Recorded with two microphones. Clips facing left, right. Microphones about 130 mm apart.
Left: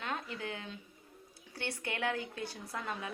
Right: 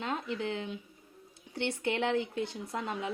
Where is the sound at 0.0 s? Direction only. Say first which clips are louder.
Right 5 dB; 25° right (ahead or behind).